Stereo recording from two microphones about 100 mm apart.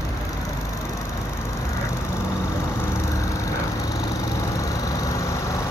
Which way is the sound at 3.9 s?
35° left (ahead or behind).